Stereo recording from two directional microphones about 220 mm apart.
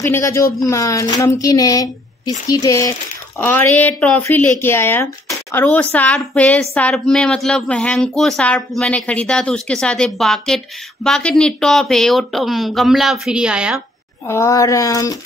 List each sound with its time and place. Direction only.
0.0 s a woman's voice: 15° left (ahead or behind); by 13.7 s 5° right (ahead or behind)
14.2 s a woman's voice: 10° left (ahead or behind)